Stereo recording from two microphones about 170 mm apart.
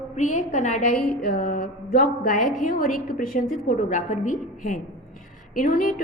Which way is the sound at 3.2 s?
55° left (ahead or behind).